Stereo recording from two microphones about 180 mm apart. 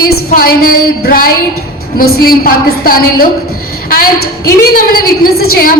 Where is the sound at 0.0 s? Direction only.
55° left (ahead or behind).